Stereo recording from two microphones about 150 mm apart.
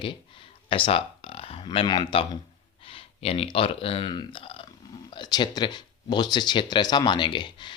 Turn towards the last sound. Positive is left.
turn(degrees=30)  # may be behind; listen again after turning